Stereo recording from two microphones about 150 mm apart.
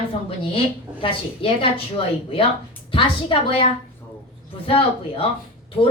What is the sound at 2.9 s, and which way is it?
A woman's voice, 35° left (ahead or behind).